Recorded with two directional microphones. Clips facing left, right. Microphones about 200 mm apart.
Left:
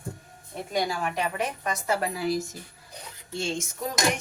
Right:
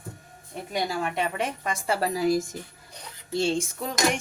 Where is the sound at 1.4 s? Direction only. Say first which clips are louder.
Even; 30° right (ahead or behind).